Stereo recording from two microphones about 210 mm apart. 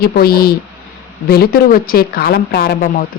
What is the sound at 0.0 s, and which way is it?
A woman's voice, 45° left (ahead or behind).